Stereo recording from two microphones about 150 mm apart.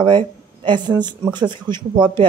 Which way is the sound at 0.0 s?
35° right (ahead or behind).